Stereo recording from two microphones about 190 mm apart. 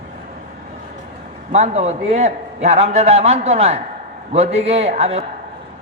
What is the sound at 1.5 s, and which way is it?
A man's voice, 35° right (ahead or behind).